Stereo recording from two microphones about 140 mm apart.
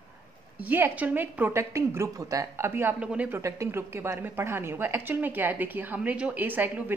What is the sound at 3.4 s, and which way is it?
A woman's voice, 20° right (ahead or behind).